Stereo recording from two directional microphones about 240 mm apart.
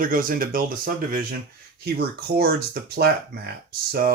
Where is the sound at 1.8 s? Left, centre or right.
Right.